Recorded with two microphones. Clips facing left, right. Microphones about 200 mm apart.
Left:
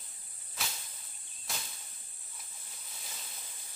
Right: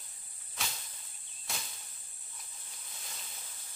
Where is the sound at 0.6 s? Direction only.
Centre (ahead or behind).